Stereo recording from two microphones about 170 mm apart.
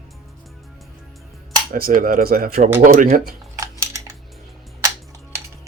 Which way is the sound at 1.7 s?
55° right (ahead or behind).